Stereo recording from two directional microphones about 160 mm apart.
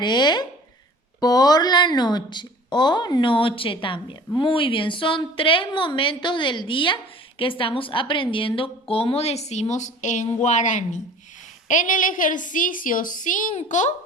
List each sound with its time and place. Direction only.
0.0 s a woman's voice: 25° left (ahead or behind); by 13.9 s 50° left (ahead or behind)